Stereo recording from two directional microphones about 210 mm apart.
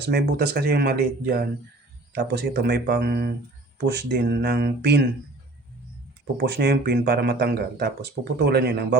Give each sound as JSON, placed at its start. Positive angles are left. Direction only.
{"t": 0.0, "sound": "speech", "side_deg": -50}
{"t": 6.3, "sound": "speech", "side_deg": -50}